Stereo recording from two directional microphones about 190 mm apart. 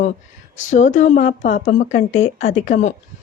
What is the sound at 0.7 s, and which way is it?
A woman's voice, 40° left (ahead or behind).